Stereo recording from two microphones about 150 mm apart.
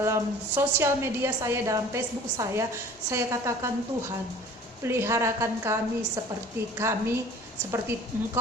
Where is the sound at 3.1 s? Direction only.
20° right (ahead or behind).